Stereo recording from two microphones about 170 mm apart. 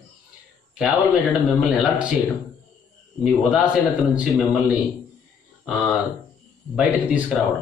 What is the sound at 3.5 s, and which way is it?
A man's voice, 5° right (ahead or behind).